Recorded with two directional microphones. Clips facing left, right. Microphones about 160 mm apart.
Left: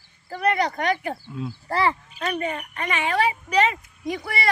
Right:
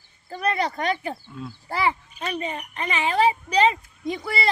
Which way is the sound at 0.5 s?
30° right (ahead or behind).